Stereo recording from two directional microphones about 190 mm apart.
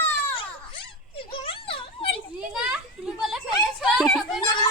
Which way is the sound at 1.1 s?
30° left (ahead or behind).